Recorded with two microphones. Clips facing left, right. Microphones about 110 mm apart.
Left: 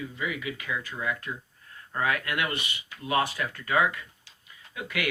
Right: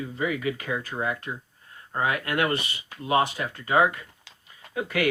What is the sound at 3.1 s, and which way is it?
Speech, 25° right (ahead or behind).